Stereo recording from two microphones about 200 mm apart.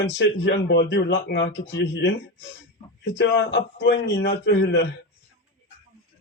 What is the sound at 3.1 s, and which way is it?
Speech, 60° left (ahead or behind).